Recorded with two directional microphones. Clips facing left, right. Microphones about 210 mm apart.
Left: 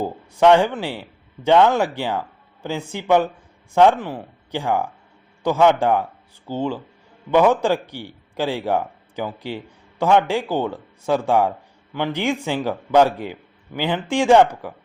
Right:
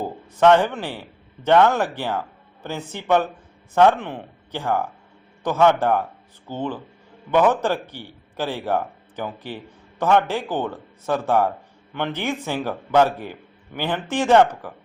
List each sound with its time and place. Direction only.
0.3 s a man's voice: 15° left (ahead or behind)